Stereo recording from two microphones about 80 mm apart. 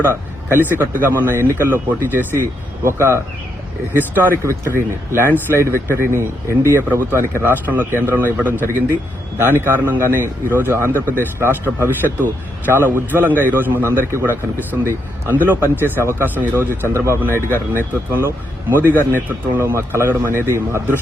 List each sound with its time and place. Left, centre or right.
0.0 s a man's voice: right